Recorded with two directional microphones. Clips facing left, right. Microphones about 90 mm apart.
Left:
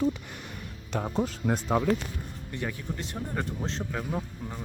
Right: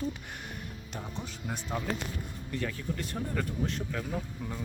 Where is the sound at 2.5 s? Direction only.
20° left (ahead or behind).